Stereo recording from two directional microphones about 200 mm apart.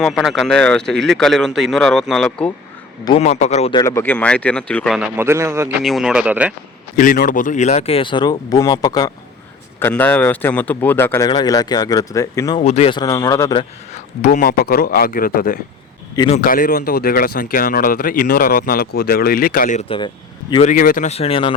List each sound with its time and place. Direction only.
0.0 s speech: centre (ahead or behind)
3.0 s speech: 30° left (ahead or behind)
3.8 s speech: 15° left (ahead or behind)
4.9 s speech: 10° right (ahead or behind)
5.8 s speech: centre (ahead or behind)
6.9 s speech: 45° left (ahead or behind); by 9.1 s 20° left (ahead or behind)
9.8 s speech: 10° left (ahead or behind)
12.5 s speech: 30° left (ahead or behind)
13.9 s speech: 35° left (ahead or behind)
16.1 s speech: 25° left (ahead or behind)
16.4 s speech: 45° left (ahead or behind); by 21.5 s 30° left (ahead or behind)